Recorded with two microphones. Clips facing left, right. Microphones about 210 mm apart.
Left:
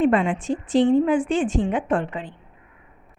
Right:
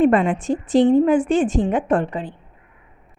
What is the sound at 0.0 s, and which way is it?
A woman's voice, 45° right (ahead or behind).